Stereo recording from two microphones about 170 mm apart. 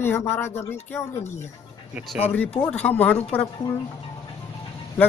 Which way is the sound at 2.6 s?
10° left (ahead or behind).